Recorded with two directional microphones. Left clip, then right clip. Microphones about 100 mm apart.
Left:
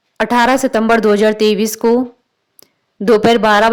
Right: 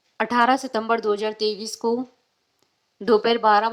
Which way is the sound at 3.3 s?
20° left (ahead or behind).